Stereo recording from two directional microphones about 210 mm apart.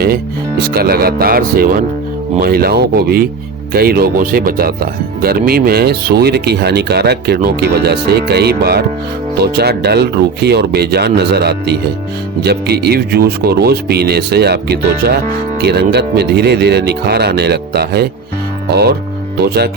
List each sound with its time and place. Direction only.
0.6 s speech: 45° right (ahead or behind)